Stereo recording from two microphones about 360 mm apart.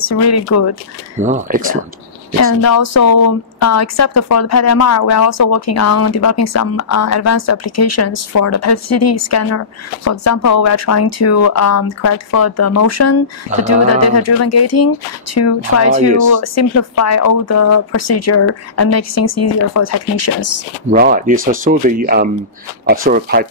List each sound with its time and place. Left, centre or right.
0.0 s a woman's voice: left
1.2 s speech: right
2.6 s a woman's voice: left
20.9 s speech: right